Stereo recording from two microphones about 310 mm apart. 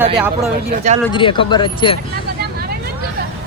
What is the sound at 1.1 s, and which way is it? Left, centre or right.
Speech, centre.